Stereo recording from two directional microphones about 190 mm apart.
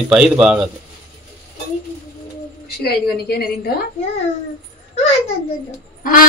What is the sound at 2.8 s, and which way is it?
Speech, 55° left (ahead or behind).